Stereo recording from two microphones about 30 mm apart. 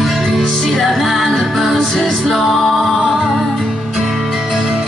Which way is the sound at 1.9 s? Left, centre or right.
Centre.